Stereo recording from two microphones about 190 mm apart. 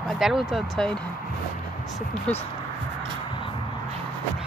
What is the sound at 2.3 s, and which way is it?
Speech, 5° left (ahead or behind).